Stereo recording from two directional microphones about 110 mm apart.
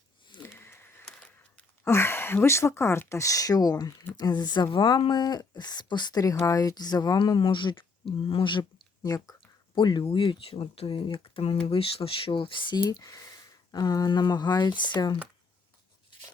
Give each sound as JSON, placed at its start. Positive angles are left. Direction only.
{"t": 0.4, "sound": "a sound", "side_deg": 20}
{"t": 1.8, "sound": "speech", "side_deg": 25}
{"t": 9.0, "sound": "speech", "side_deg": 35}
{"t": 9.7, "sound": "speech", "side_deg": 45}
{"t": 12.9, "sound": "speech", "side_deg": 30}